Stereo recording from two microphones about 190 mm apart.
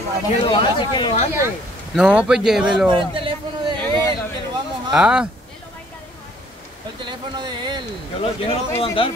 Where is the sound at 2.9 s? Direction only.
25° right (ahead or behind).